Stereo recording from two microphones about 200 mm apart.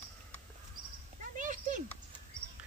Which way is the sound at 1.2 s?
40° right (ahead or behind).